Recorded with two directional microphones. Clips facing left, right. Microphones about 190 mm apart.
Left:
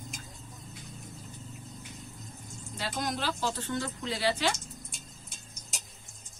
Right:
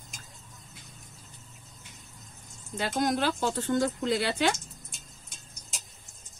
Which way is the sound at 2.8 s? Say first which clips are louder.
Right 7 dB; 55° right (ahead or behind).